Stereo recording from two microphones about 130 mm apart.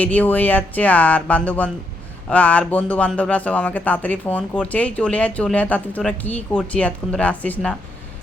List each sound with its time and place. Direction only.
0.0 s speech: 10° left (ahead or behind)